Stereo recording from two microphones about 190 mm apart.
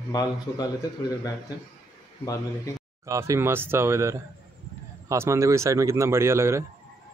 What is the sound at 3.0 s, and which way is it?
A man's voice, 15° right (ahead or behind).